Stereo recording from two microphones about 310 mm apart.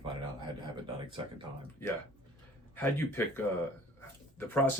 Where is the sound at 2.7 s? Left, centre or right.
Centre.